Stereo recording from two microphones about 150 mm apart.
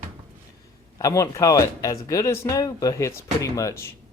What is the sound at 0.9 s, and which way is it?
Speech, 20° left (ahead or behind).